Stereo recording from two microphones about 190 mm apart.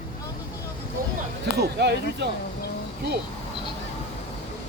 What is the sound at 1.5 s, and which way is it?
Speech, 60° right (ahead or behind).